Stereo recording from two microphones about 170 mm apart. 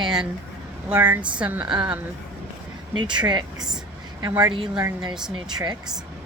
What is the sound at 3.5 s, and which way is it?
Speech, 5° right (ahead or behind).